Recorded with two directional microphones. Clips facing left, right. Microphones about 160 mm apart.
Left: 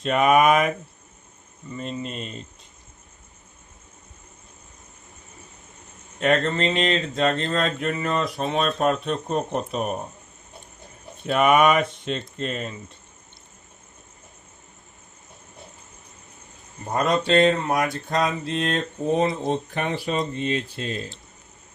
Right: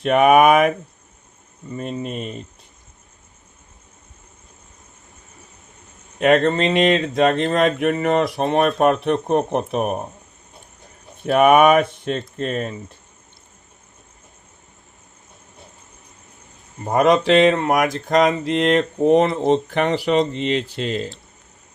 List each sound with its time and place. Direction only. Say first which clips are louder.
0.0 s speech: right 5 dB; 60° right (ahead or behind)
1.7 s speech: right 4 dB; 55° right (ahead or behind)
6.1 s speech: right 6 dB; 70° right (ahead or behind)
6.9 s speech: right 6 dB; 90° right; by 10.0 s 65° right (ahead or behind)
11.3 s speech: right 5 dB; 55° right (ahead or behind)
16.8 s a sound: right 7 dB; 85° right